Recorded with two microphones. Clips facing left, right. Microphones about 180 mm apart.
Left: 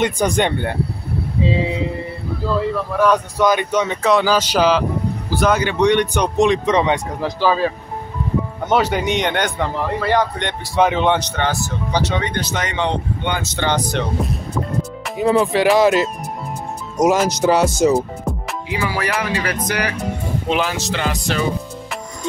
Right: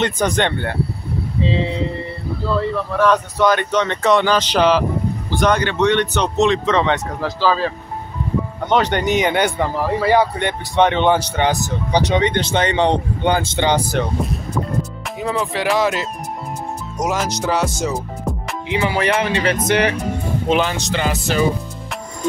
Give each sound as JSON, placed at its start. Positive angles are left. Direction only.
{"t": 0.0, "sound": "speech", "side_deg": 10}
{"t": 3.0, "sound": "a man's voice", "side_deg": 10}
{"t": 10.8, "sound": "a man's voice", "side_deg": 5}
{"t": 11.1, "sound": "speech", "side_deg": -10}
{"t": 13.6, "sound": "speech", "side_deg": -15}
{"t": 13.9, "sound": "a man's voice", "side_deg": 0}
{"t": 18.7, "sound": "speech", "side_deg": -25}
{"t": 20.4, "sound": "a man's voice", "side_deg": 0}